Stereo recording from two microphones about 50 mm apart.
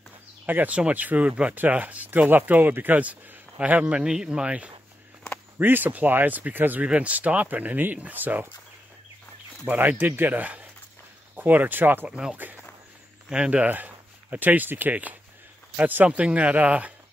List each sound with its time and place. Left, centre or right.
0.5 s speech: right
3.9 s speech: centre
5.6 s speech: right
6.8 s speech: right
9.8 s speech: right
12.1 s speech: right
13.7 s speech: right
16.1 s speech: right